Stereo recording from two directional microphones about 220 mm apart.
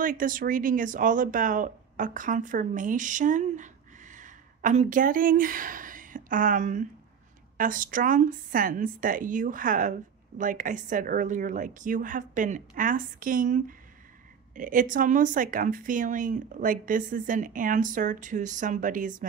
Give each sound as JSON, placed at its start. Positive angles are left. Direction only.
{"t": 0.0, "sound": "a woman's voice", "side_deg": -40}